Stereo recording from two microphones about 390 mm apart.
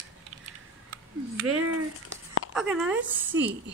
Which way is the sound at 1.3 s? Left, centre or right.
Right.